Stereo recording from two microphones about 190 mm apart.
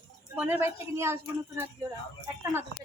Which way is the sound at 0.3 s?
10° right (ahead or behind).